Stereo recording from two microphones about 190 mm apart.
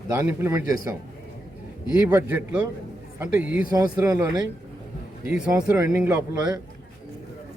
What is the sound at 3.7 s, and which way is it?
Speech, 15° right (ahead or behind).